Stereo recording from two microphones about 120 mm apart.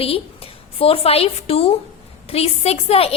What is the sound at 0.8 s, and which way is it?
A woman's voice, 55° left (ahead or behind).